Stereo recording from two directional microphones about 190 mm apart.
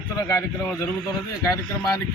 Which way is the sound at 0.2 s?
20° left (ahead or behind).